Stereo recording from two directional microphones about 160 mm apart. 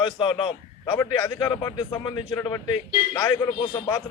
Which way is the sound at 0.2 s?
30° left (ahead or behind).